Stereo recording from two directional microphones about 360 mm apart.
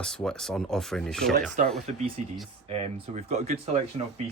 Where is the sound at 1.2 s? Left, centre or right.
Right.